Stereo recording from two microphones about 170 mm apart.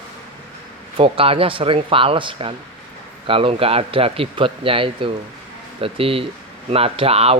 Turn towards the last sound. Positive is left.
turn(degrees=-35)  # may be behind; listen again after turning